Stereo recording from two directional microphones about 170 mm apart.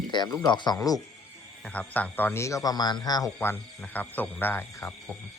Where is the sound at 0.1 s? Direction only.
25° left (ahead or behind).